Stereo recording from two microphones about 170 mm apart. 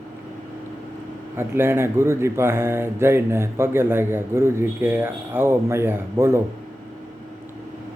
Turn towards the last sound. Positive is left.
turn(degrees=-15)  # may be behind; listen again after turning